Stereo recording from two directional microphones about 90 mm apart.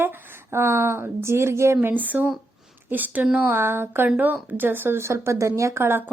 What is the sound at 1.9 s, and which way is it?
A woman's voice, 20° right (ahead or behind).